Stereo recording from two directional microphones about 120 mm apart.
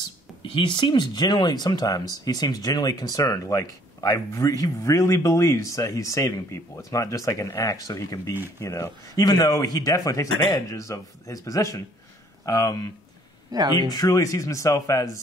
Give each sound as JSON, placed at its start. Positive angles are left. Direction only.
{"t": 0.4, "sound": "speech", "side_deg": 40}
{"t": 13.5, "sound": "speech", "side_deg": -35}
{"t": 13.8, "sound": "speech", "side_deg": 30}